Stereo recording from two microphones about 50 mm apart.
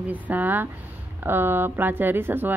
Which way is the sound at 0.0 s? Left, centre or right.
Right.